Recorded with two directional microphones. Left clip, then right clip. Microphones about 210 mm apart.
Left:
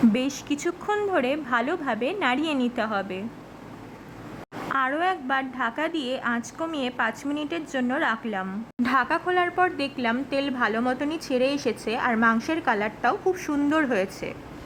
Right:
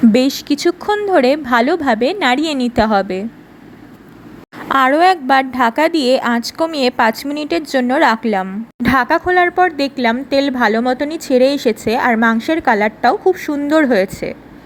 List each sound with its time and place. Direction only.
0.1 s a woman's voice: 20° right (ahead or behind)
4.7 s a woman's voice: 25° right (ahead or behind)